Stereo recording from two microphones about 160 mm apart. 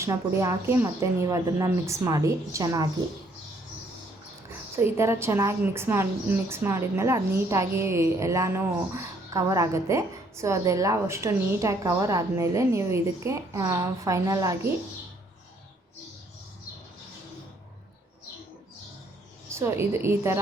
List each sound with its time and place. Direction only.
0.0 s a woman's voice: 20° right (ahead or behind)
4.8 s a woman's voice: 15° right (ahead or behind)
19.5 s a woman's voice: 15° right (ahead or behind)